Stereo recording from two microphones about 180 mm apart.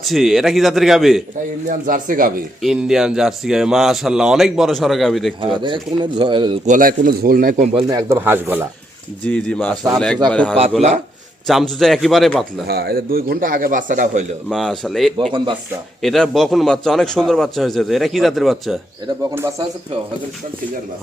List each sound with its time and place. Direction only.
0.0 s a man's voice: centre (ahead or behind)
1.6 s a man's voice: 50° right (ahead or behind)
2.6 s a man's voice: centre (ahead or behind)
5.4 s speech: 25° right (ahead or behind)
6.7 s a man's voice: 50° right (ahead or behind)
7.9 s speech: 15° right (ahead or behind)
9.2 s a man's voice: 10° left (ahead or behind)
10.8 s speech: 35° right (ahead or behind)
11.4 s a man's voice: centre (ahead or behind)
12.6 s a man's voice: 60° right (ahead or behind); by 14.3 s 45° right (ahead or behind)
14.5 s a man's voice: centre (ahead or behind)
19.3 s speech: 15° right (ahead or behind)